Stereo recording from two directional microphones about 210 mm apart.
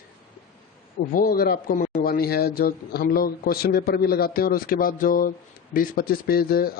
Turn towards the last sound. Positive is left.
turn(degrees=45)  # may be behind; listen again after turning